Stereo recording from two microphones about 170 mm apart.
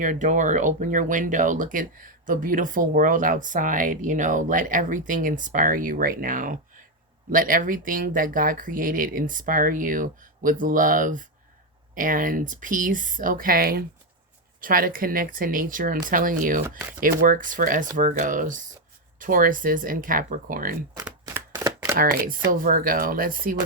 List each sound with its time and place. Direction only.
0.0 s speech: 50° right (ahead or behind)
20.9 s a sound: 20° right (ahead or behind)
21.9 s speech: 55° right (ahead or behind)